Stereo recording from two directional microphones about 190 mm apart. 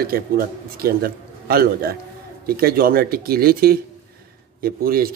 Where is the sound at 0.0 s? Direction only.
50° right (ahead or behind).